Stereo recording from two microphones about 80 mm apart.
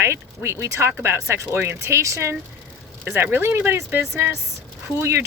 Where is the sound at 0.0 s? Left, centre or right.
Right.